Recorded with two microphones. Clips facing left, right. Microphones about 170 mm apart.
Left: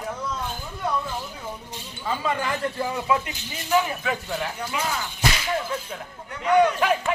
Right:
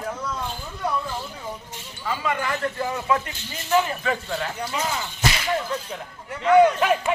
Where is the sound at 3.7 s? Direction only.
Centre (ahead or behind).